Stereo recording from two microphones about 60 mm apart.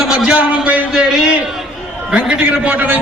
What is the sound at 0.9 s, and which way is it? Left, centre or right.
A man's voice, centre.